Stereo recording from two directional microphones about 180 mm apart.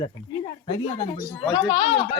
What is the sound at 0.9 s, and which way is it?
Speech, 35° left (ahead or behind).